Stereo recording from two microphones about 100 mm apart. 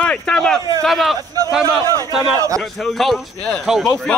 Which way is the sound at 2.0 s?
35° right (ahead or behind).